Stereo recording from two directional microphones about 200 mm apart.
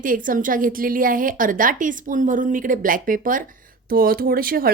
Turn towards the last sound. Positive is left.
turn(degrees=-45)  # may be behind; listen again after turning